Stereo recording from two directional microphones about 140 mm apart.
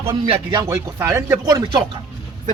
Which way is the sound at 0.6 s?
20° right (ahead or behind).